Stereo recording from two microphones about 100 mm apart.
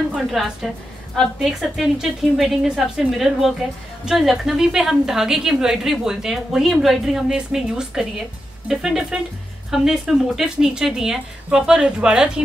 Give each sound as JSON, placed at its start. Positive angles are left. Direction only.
{"t": 0.1, "sound": "a woman's voice", "side_deg": -5}